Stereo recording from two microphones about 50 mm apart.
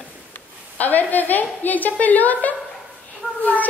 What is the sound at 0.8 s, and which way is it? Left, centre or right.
A woman's voice, left.